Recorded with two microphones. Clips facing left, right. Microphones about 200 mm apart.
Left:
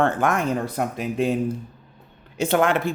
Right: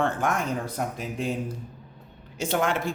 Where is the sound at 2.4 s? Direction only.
60° left (ahead or behind).